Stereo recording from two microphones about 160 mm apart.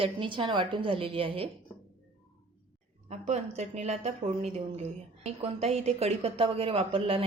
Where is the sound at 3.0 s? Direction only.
40° right (ahead or behind).